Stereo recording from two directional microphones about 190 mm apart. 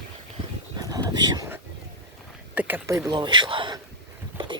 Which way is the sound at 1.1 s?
20° right (ahead or behind).